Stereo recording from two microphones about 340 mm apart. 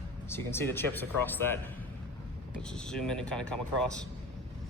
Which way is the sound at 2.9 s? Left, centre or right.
Centre.